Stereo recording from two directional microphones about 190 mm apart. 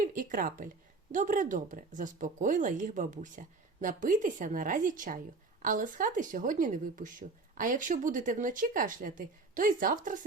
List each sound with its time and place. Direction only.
0.0 s speech: 45° right (ahead or behind)